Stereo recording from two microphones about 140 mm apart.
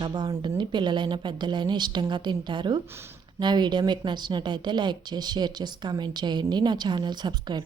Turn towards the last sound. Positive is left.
turn(degrees=-30)  # may be behind; listen again after turning